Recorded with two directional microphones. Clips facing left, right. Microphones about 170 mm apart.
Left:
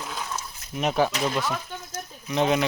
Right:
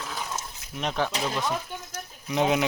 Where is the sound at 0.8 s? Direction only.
10° left (ahead or behind).